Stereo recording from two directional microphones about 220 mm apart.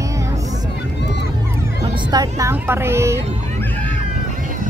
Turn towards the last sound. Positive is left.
turn(degrees=-10)  # may be behind; listen again after turning